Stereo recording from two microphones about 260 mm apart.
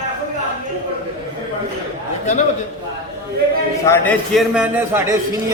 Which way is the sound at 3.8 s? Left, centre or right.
Centre.